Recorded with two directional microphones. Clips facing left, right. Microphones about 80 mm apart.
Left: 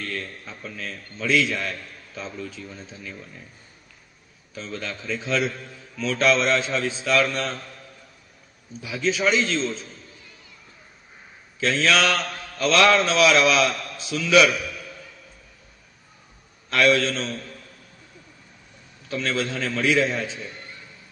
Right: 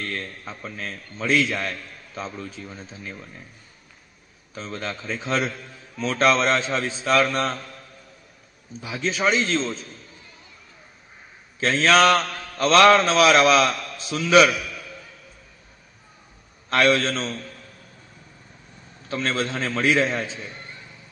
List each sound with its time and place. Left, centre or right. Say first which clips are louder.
0.0 s a man's voice: right 1 dB; right
4.6 s a man's voice: right 1 dB; right
8.8 s a man's voice: even; right
11.6 s a man's voice: right 4 dB; right
16.6 s a man's voice: even; right
19.0 s a man's voice: right 1 dB; right